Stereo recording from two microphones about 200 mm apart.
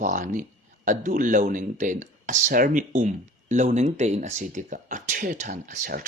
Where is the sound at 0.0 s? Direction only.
40° right (ahead or behind).